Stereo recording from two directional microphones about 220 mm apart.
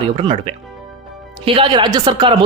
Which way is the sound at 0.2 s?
25° right (ahead or behind).